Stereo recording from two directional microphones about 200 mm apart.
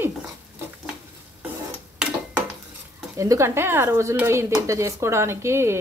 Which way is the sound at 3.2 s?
15° right (ahead or behind).